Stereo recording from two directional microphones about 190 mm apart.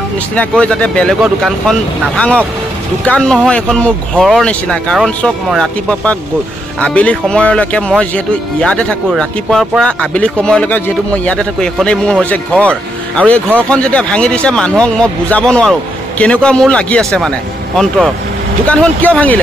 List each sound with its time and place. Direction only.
0.4 s speech: 5° left (ahead or behind)
18.7 s speech: 5° left (ahead or behind)